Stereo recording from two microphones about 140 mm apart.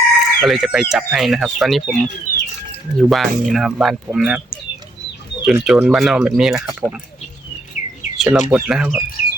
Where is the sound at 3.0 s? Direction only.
Centre (ahead or behind).